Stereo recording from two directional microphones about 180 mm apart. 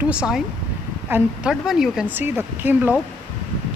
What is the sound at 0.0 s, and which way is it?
A woman's voice, 5° right (ahead or behind).